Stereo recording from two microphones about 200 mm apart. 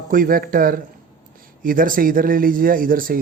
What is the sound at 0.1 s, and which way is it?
Speech, 45° right (ahead or behind).